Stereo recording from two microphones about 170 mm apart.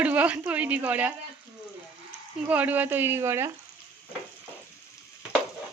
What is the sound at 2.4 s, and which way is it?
Speech, 10° right (ahead or behind).